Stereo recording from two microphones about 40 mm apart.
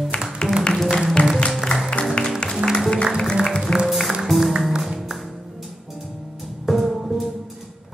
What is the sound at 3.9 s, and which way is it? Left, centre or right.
Music, centre.